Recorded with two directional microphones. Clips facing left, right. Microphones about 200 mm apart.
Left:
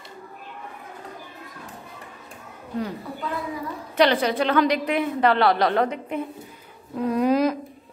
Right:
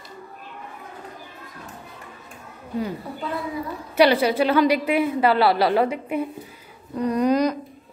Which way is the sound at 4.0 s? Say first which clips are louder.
Right 3 dB; 10° right (ahead or behind).